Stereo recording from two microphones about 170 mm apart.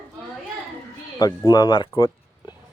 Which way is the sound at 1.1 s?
20° left (ahead or behind).